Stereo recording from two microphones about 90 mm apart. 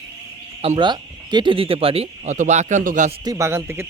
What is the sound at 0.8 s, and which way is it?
Speech, 55° right (ahead or behind).